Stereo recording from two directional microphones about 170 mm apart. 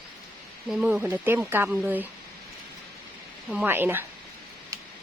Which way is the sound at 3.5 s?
10° right (ahead or behind).